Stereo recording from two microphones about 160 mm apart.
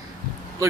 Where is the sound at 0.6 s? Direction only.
20° right (ahead or behind).